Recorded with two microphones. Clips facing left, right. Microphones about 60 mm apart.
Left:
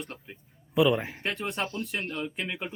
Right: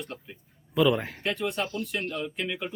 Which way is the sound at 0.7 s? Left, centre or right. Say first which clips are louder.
Even; centre.